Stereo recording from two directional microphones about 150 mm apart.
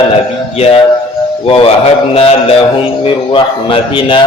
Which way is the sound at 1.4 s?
35° left (ahead or behind).